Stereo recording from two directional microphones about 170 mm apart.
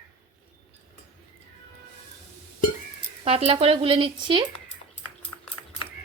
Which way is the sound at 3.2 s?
35° right (ahead or behind).